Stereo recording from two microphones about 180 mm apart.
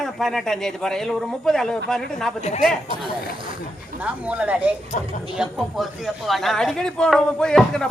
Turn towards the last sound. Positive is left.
turn(degrees=5)  # may be behind; listen again after turning